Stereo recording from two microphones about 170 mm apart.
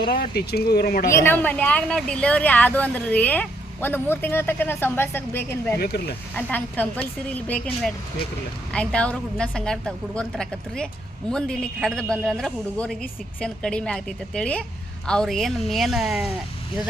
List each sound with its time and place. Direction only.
0.1 s speech: 65° left (ahead or behind)
1.1 s speech: 10° left (ahead or behind)
5.8 s speech: 65° left (ahead or behind)
6.3 s a man's voice: 10° left (ahead or behind)